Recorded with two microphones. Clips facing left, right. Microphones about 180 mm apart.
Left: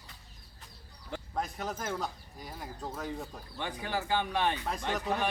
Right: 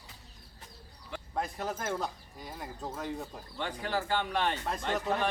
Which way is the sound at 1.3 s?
5° right (ahead or behind).